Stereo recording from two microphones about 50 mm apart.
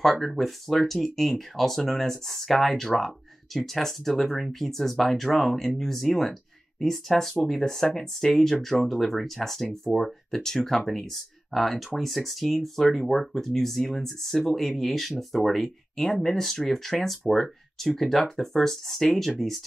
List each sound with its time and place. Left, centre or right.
0.0 s speech: centre